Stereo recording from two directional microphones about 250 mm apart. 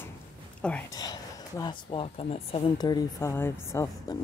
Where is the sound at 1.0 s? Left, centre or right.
Centre.